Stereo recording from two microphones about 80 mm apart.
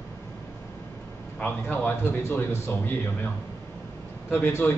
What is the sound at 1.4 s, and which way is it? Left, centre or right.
Speech, left.